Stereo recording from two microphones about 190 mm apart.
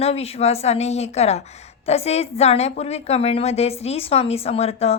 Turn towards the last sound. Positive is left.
turn(degrees=35)  # may be behind; listen again after turning